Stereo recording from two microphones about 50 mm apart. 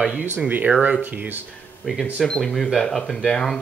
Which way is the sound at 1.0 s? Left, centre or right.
Right.